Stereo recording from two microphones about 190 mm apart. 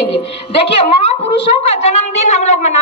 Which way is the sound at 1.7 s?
35° left (ahead or behind).